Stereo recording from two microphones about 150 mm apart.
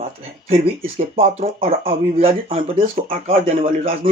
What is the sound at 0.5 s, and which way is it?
Speech, 40° right (ahead or behind).